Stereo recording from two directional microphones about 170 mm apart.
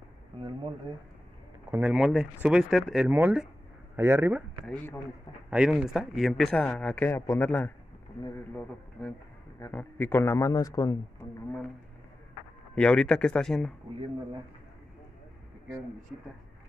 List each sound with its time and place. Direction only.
0.4 s speech: 30° right (ahead or behind)
1.8 s speech: 5° right (ahead or behind)
4.6 s a man's voice: 10° left (ahead or behind)
5.5 s speech: 5° right (ahead or behind); by 7.7 s 10° left (ahead or behind)
9.0 s a man's voice: 10° left (ahead or behind)
12.7 s speech: 5° left (ahead or behind)